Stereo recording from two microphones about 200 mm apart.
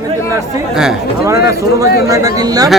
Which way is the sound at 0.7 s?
5° right (ahead or behind).